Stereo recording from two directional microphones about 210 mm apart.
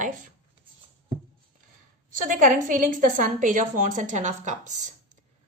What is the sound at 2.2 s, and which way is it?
Speech, 40° right (ahead or behind).